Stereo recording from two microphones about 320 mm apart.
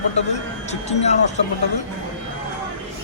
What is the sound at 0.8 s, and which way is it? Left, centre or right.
Speech, left.